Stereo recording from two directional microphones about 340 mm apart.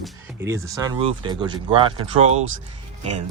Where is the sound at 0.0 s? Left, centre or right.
Centre.